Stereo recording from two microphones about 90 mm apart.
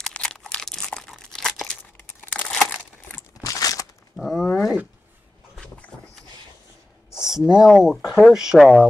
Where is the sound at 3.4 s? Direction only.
40° left (ahead or behind).